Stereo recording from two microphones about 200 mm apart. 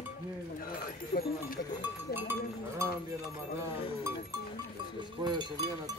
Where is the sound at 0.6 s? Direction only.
45° left (ahead or behind).